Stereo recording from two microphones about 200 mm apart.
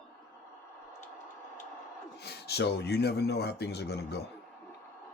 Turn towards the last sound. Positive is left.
turn(degrees=55)  # may be behind; listen again after turning